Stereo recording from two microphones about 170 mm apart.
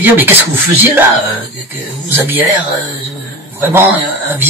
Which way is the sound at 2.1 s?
10° right (ahead or behind).